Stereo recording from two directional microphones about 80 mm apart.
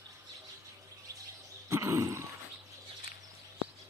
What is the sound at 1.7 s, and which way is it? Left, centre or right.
Roar, right.